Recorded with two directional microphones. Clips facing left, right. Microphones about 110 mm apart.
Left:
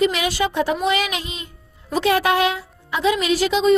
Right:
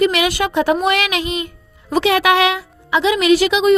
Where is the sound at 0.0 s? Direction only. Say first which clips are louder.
Right 3 dB; 70° right (ahead or behind).